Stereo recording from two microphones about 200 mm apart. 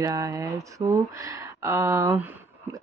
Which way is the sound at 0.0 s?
15° right (ahead or behind).